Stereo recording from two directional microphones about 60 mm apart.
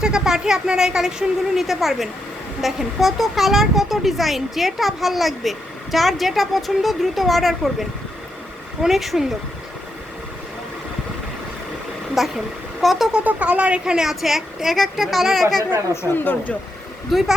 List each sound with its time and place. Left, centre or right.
0.0 s speech: centre
12.1 s speech: centre
13.2 s speech: right; by 15.6 s centre
16.1 s speech: left
17.1 s speech: centre